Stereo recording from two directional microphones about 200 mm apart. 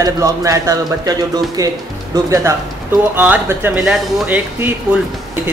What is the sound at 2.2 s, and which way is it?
Speech, 15° right (ahead or behind).